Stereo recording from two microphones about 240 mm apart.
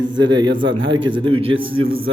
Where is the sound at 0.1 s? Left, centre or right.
Centre.